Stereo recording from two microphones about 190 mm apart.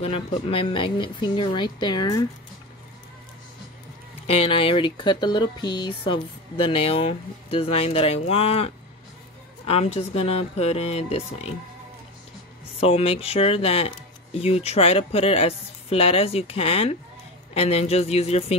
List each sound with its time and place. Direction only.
0.0 s speech: 30° left (ahead or behind)
4.3 s speech: 30° left (ahead or behind)
12.8 s speech: 30° left (ahead or behind)